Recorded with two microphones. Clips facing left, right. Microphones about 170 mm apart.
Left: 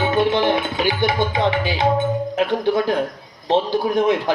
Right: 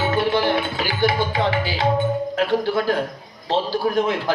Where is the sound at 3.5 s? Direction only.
20° left (ahead or behind).